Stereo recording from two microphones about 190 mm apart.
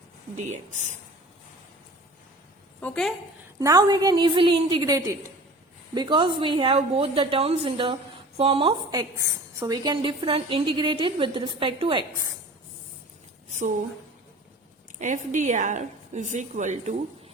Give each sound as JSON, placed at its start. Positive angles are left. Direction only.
{"t": 0.3, "sound": "a woman's voice", "side_deg": -40}
{"t": 2.8, "sound": "a woman's voice", "side_deg": 5}
{"t": 3.6, "sound": "a woman's voice", "side_deg": -20}
{"t": 14.9, "sound": "a woman's voice", "side_deg": -40}